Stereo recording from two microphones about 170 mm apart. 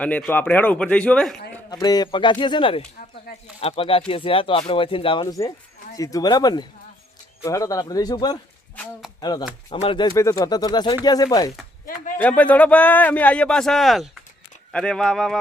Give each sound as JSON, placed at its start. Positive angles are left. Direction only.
{"t": 0.0, "sound": "a man's voice", "side_deg": 10}
{"t": 1.7, "sound": "speech", "side_deg": 25}
{"t": 10.2, "sound": "speech", "side_deg": 20}
{"t": 12.1, "sound": "a man's voice", "side_deg": 10}